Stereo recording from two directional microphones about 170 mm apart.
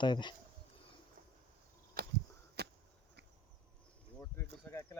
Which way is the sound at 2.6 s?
80° right.